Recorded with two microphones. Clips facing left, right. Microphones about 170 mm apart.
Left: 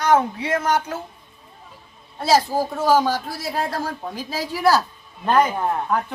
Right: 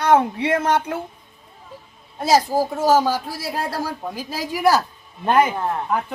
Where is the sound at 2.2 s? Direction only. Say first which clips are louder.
Right 1 dB; 15° right (ahead or behind).